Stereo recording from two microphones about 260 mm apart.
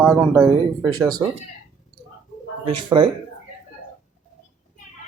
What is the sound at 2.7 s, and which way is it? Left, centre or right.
Speech, centre.